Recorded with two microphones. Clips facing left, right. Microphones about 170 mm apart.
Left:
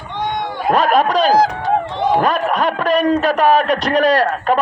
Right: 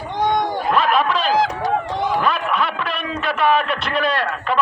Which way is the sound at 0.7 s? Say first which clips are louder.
Left 6 dB; 40° left (ahead or behind).